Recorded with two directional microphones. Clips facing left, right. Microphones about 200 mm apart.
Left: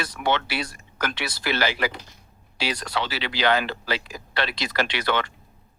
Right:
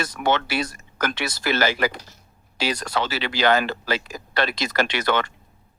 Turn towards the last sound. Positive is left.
turn(degrees=-45)  # may be behind; listen again after turning